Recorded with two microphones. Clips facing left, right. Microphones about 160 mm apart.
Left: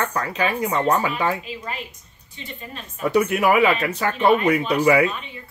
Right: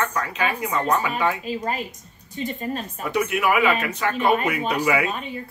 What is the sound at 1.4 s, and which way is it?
Speech, 45° right (ahead or behind).